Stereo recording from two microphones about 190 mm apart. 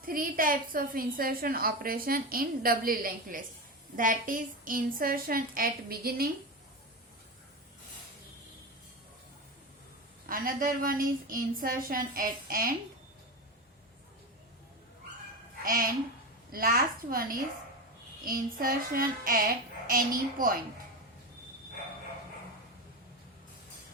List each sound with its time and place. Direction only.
0.0 s a woman's voice: 50° right (ahead or behind)
10.2 s a woman's voice: 50° right (ahead or behind)
15.6 s a woman's voice: 45° right (ahead or behind)